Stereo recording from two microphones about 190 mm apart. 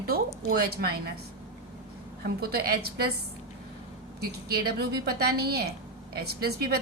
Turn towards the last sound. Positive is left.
turn(degrees=-55)  # may be behind; listen again after turning